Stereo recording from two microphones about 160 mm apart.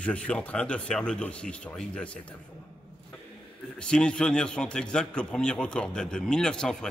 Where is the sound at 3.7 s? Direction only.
5° left (ahead or behind).